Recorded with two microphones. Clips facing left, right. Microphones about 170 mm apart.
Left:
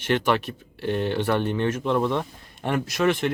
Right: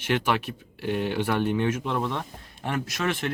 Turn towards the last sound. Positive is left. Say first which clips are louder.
# left 6 dB
turn(degrees=0)  # may be behind; listen again after turning